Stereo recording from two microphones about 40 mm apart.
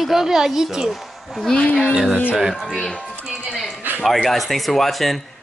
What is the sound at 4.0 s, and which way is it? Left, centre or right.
Speech, centre.